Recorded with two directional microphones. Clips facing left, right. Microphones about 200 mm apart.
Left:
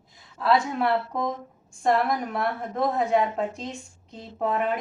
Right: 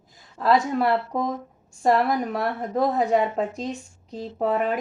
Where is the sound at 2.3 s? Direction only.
35° right (ahead or behind).